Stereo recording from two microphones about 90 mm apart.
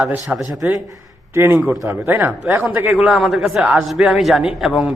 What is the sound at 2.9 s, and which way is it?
Speech, 10° right (ahead or behind).